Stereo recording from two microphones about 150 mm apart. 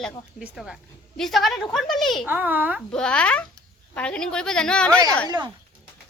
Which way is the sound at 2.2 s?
10° right (ahead or behind).